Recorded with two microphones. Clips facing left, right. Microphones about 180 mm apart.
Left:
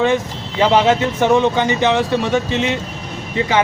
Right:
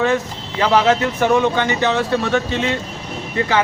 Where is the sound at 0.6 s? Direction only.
20° left (ahead or behind).